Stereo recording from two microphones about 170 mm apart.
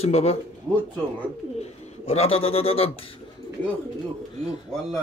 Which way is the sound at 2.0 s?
35° left (ahead or behind).